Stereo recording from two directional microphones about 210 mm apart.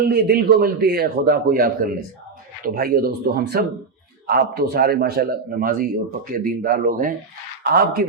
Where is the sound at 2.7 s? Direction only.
45° right (ahead or behind).